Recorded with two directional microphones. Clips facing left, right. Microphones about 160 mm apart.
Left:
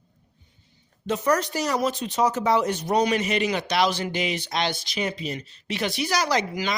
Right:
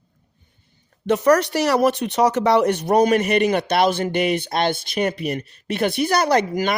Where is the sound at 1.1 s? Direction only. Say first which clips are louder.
Right 7 dB; 70° right (ahead or behind).